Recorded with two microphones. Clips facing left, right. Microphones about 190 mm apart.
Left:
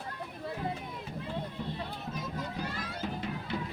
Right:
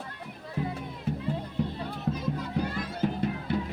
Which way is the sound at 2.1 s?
70° right (ahead or behind).